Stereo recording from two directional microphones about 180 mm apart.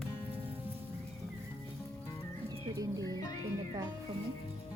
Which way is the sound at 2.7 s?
20° right (ahead or behind).